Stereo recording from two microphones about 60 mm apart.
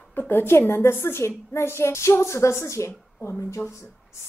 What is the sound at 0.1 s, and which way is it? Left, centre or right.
A woman's voice, left.